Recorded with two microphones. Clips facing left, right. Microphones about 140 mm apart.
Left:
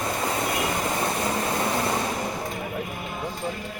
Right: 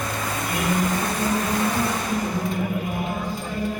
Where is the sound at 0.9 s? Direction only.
25° left (ahead or behind).